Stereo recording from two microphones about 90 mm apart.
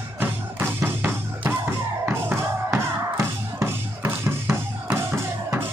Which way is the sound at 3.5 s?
30° right (ahead or behind).